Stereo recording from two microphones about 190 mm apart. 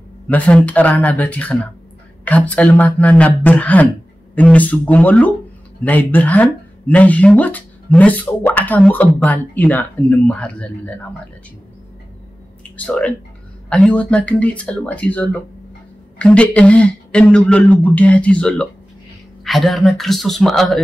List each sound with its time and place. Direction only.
0.3 s speech: 5° left (ahead or behind)
12.7 s a man's voice: 5° left (ahead or behind)